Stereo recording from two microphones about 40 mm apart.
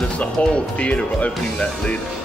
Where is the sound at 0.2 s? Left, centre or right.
Left.